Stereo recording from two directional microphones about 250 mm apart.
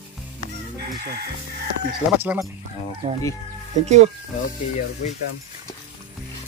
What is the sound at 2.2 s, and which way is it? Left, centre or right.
Speech, centre.